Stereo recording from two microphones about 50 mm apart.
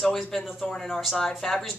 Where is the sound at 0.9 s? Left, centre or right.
Centre.